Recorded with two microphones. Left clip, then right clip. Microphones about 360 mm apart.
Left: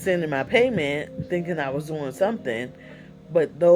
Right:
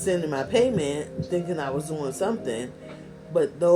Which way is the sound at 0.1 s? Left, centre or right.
Left.